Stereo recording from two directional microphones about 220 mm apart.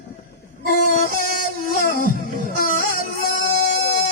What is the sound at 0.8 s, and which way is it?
Music, 40° left (ahead or behind).